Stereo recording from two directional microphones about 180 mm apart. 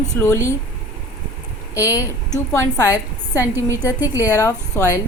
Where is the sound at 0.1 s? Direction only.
15° left (ahead or behind).